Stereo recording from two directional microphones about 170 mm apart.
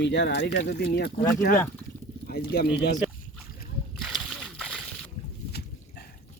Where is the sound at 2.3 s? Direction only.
65° left (ahead or behind).